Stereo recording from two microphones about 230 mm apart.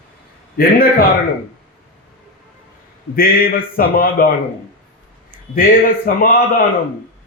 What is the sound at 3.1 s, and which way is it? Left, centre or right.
A man's voice, left.